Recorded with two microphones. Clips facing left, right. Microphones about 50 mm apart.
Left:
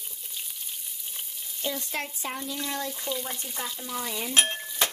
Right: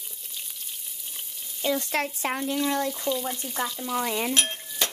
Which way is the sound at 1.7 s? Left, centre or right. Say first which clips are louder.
Right 7 dB; right.